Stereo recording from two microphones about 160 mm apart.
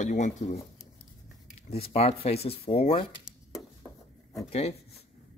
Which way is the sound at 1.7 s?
40° left (ahead or behind).